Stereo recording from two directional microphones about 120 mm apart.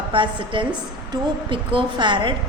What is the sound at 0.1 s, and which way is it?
A woman's voice, 45° right (ahead or behind).